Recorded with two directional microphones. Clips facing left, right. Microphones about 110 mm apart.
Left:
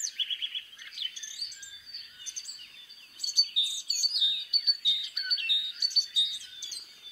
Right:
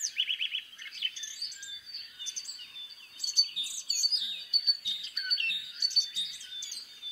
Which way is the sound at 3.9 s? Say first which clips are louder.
Left 1 dB; 40° right (ahead or behind).